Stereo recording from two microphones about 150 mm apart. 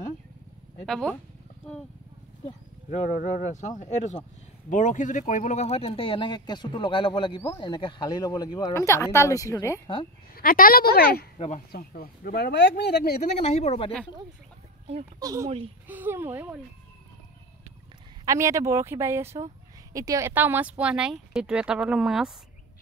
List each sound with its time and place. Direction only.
0.8 s speech: 5° left (ahead or behind)
2.9 s speech: 50° left (ahead or behind); by 9.8 s 20° left (ahead or behind)
10.3 s a woman's voice: 75° left (ahead or behind); by 11.2 s 90° left
11.3 s speech: 40° left (ahead or behind)
11.7 s a woman's voice: 90° left
13.2 s speech: 50° left (ahead or behind)
15.1 s speech: 25° right (ahead or behind)
15.9 s speech: 15° right (ahead or behind)
18.2 s speech: 20° right (ahead or behind); by 22.3 s centre (ahead or behind)